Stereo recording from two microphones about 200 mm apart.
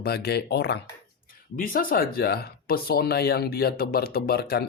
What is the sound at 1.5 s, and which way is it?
Speech, 45° left (ahead or behind).